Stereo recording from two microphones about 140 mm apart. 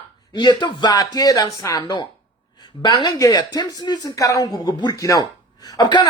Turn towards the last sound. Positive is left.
turn(degrees=30)  # may be behind; listen again after turning